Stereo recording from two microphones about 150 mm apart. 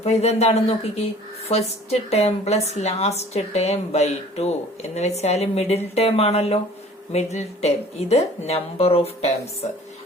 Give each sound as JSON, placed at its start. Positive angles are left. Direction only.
{"t": 0.0, "sound": "a woman's voice", "side_deg": 45}